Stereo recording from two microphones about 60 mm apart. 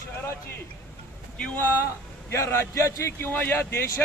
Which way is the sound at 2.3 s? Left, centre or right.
Left.